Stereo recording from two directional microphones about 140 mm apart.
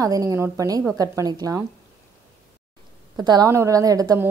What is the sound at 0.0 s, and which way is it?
A woman's voice, 25° right (ahead or behind).